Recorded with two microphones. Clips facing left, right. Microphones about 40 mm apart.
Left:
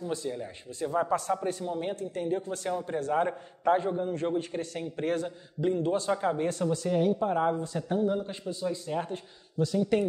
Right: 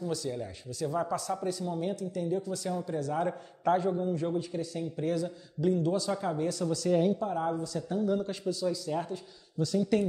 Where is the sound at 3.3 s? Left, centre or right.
Left.